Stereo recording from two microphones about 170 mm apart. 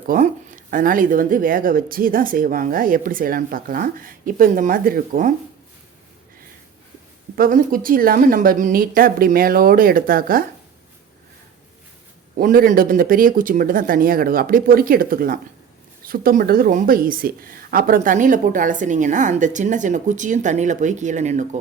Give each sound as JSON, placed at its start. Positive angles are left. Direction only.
{"t": 0.1, "sound": "speech", "side_deg": -55}
{"t": 7.3, "sound": "speech", "side_deg": -60}
{"t": 12.4, "sound": "speech", "side_deg": -55}